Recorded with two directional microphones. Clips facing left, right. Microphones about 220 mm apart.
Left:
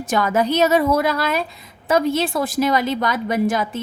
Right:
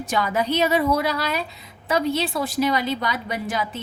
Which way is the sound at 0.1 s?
45° left (ahead or behind).